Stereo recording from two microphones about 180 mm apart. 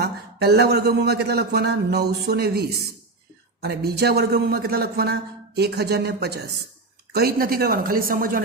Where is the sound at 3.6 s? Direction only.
60° right (ahead or behind).